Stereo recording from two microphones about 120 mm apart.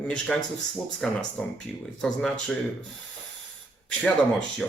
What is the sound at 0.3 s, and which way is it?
Speech, centre (ahead or behind).